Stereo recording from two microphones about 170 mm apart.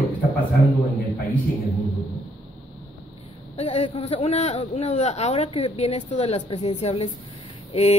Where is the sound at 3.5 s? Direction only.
35° left (ahead or behind).